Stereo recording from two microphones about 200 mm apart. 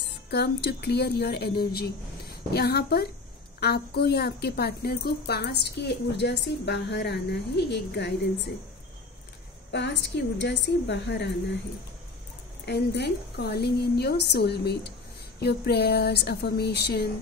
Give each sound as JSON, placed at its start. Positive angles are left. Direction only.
{"t": 0.3, "sound": "a woman's voice", "side_deg": 55}
{"t": 9.7, "sound": "a woman's voice", "side_deg": 60}
{"t": 12.6, "sound": "a woman's voice", "side_deg": 55}